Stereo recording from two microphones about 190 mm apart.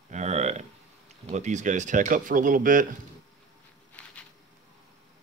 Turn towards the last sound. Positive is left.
turn(degrees=10)  # may be behind; listen again after turning